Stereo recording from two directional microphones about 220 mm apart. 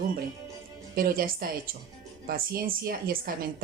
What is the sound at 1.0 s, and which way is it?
A woman's voice, 40° right (ahead or behind).